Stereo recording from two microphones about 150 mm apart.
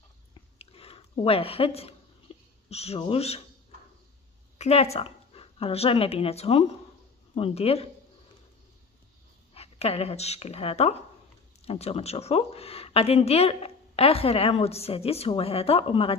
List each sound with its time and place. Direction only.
0.3 s a sound: 40° left (ahead or behind)
2.7 s speech: 45° left (ahead or behind)
4.6 s a woman's voice: 45° left (ahead or behind)
9.5 s a woman's voice: 40° left (ahead or behind)